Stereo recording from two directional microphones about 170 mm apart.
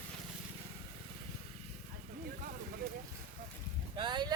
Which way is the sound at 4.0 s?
25° right (ahead or behind).